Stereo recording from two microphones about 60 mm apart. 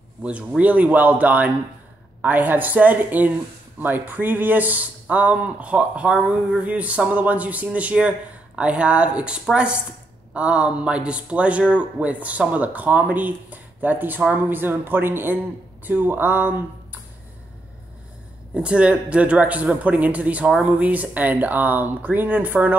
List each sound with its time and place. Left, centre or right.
0.2 s a man's voice: centre
18.5 s a man's voice: centre